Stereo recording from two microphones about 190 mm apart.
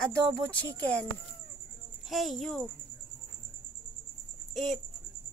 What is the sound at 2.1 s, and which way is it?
Speech, centre (ahead or behind).